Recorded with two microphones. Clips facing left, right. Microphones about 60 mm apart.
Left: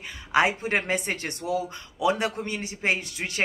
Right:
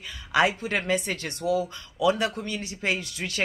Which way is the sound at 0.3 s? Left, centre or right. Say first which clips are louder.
Left 1 dB; left.